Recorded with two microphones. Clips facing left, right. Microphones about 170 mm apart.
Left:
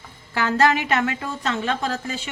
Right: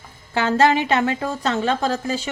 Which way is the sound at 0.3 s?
25° right (ahead or behind).